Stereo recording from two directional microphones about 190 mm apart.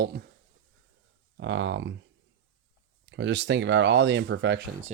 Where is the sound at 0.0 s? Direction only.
55° right (ahead or behind).